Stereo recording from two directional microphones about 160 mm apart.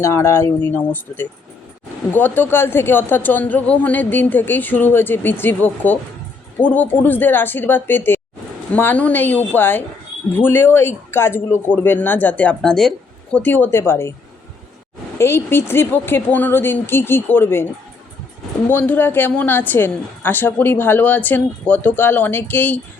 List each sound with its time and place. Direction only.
0.0 s a woman's voice: 15° left (ahead or behind)
2.1 s a woman's voice: 10° left (ahead or behind)
15.2 s a woman's voice: 15° left (ahead or behind)
18.7 s a woman's voice: 10° left (ahead or behind)